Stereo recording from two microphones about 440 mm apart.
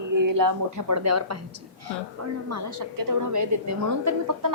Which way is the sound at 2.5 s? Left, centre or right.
Right.